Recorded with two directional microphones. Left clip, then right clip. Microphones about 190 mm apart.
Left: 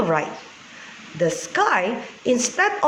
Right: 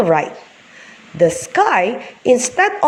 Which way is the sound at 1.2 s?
30° right (ahead or behind).